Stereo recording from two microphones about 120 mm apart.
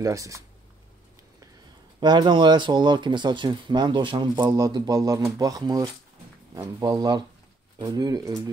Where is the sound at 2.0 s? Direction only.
40° right (ahead or behind).